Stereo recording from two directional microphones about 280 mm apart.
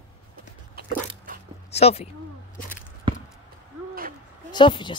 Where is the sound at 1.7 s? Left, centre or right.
Left.